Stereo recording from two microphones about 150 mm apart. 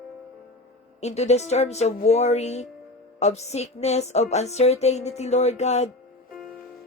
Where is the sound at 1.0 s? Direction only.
45° left (ahead or behind).